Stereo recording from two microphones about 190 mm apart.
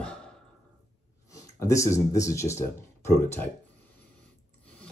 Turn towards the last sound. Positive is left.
turn(degrees=15)  # may be behind; listen again after turning